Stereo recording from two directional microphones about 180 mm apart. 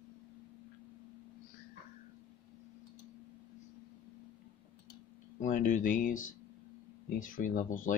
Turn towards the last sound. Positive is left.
turn(degrees=50)  # may be behind; listen again after turning